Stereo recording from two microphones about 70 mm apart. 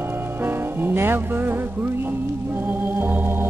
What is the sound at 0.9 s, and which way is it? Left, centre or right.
Music, right.